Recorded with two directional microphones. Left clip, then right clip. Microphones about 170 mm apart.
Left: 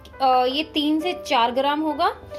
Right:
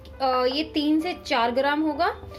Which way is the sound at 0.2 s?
15° left (ahead or behind).